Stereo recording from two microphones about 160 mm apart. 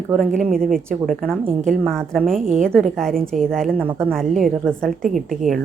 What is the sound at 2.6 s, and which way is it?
A woman's voice, 5° left (ahead or behind).